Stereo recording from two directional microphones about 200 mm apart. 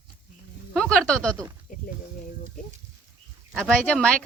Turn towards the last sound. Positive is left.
turn(degrees=5)  # may be behind; listen again after turning